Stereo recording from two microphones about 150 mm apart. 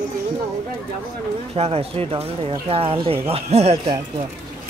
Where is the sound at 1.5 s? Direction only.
40° right (ahead or behind).